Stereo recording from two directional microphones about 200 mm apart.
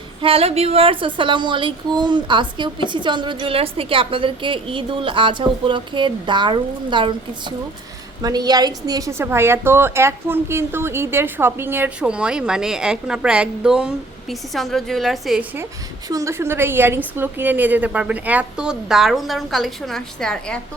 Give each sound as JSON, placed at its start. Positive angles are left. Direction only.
{"t": 0.2, "sound": "a woman's voice", "side_deg": -30}
{"t": 16.0, "sound": "a woman's voice", "side_deg": -15}